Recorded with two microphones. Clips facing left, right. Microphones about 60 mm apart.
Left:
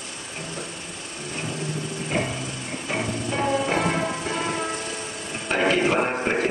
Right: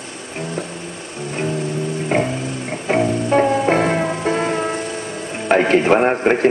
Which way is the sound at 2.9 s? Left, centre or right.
Right.